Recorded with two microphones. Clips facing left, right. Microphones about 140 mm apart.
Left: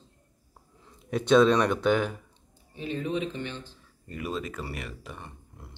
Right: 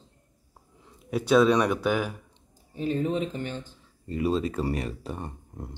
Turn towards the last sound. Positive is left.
turn(degrees=-40)  # may be behind; listen again after turning